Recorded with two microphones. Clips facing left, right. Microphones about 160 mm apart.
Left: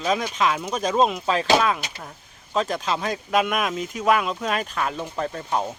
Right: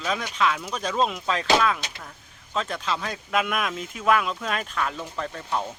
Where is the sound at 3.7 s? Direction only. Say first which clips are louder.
Left 1 dB; 10° left (ahead or behind).